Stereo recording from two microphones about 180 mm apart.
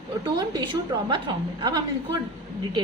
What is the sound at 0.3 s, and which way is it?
Speech, 20° right (ahead or behind).